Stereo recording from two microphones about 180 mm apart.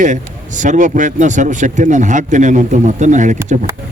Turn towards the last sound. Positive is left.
turn(degrees=-45)  # may be behind; listen again after turning